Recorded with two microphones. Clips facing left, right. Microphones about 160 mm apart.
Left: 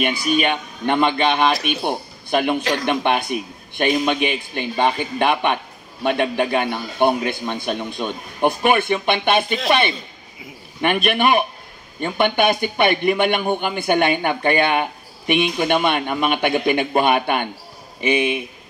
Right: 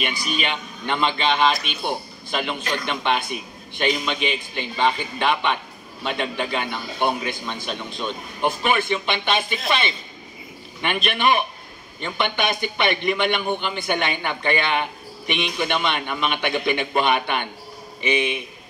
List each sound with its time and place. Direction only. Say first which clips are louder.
0.0 s a man's voice: left 7 dB; 50° left (ahead or behind)